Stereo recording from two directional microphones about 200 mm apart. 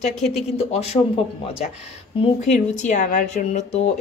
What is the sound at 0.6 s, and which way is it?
Speech, 30° left (ahead or behind).